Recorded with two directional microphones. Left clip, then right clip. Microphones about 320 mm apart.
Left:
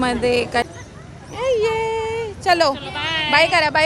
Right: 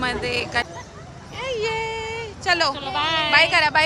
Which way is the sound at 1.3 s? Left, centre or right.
Centre.